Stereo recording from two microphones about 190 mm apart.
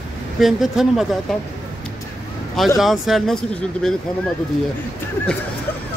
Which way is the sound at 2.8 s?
Centre (ahead or behind).